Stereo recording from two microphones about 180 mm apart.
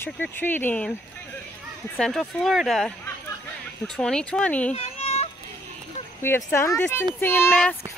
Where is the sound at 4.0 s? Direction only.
5° left (ahead or behind).